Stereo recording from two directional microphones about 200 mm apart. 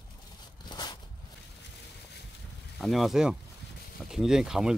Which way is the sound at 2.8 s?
Centre (ahead or behind).